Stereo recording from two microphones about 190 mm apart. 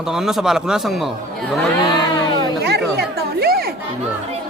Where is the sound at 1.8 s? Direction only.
20° left (ahead or behind).